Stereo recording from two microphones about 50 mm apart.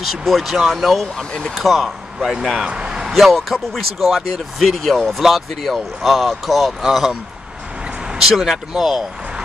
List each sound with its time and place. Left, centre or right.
0.0 s speech: centre
1.1 s speech: centre
1.6 s speech: centre
2.6 s a sound: centre
3.1 s a man's voice: centre
8.2 s speech: centre